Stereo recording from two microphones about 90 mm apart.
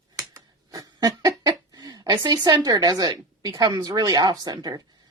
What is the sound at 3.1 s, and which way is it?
A woman's voice, 50° right (ahead or behind).